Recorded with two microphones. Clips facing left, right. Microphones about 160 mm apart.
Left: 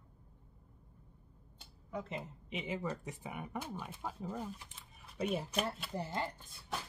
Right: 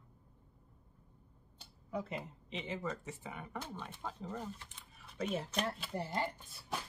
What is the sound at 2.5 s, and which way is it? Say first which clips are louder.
Speech: left 2 dB; 10° left (ahead or behind).